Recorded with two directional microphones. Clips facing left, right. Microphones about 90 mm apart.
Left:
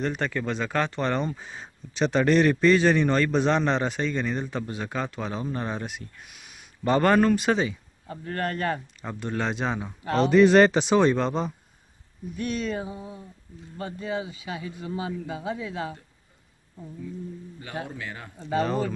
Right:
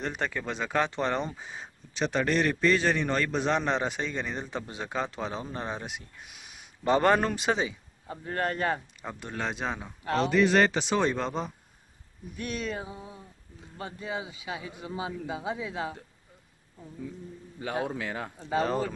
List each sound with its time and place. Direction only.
0.0 s a man's voice: 15° right (ahead or behind); by 10.3 s centre (ahead or behind)
10.3 s speech: 35° left (ahead or behind)
11.0 s a sound: centre (ahead or behind)
13.7 s a man's voice: 5° right (ahead or behind)
17.8 s speech: 90° right
18.4 s a sound: 5° right (ahead or behind)